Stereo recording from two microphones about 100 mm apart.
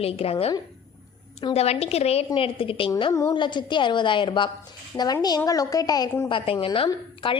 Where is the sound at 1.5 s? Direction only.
90° left.